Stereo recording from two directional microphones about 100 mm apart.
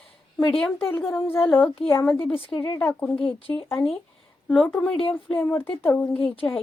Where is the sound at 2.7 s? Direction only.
20° left (ahead or behind).